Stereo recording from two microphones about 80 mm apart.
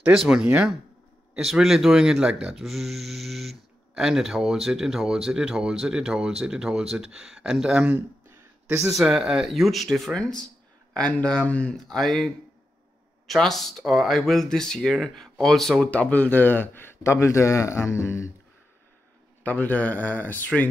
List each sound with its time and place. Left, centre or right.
0.2 s speech: centre
13.3 s speech: centre
15.8 s a man's voice: centre; by 18.3 s left
19.4 s speech: left